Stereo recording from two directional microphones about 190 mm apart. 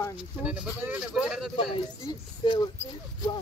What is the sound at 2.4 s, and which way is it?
Speech, 25° left (ahead or behind).